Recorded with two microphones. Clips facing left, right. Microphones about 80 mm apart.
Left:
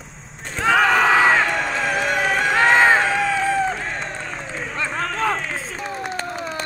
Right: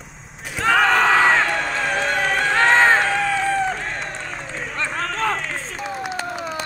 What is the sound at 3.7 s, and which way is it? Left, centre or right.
Run, centre.